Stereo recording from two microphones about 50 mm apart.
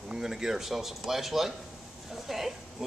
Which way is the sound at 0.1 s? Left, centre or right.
Centre.